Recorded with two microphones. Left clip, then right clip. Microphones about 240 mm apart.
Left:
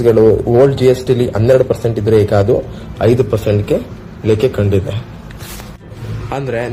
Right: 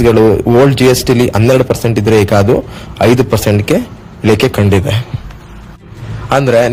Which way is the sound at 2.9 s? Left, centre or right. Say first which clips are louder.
Right 3 dB; right.